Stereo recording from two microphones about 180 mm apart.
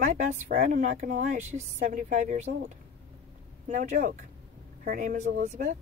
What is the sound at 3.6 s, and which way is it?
Speech, 40° right (ahead or behind).